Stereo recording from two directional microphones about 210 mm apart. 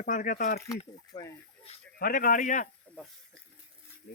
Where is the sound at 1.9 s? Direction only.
45° left (ahead or behind).